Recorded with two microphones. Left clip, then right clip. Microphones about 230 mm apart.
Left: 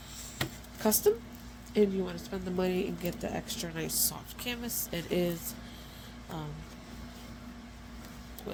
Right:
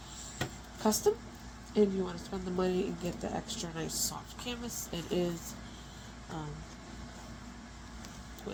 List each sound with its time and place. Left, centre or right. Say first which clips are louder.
0.8 s speech: left 2 dB; left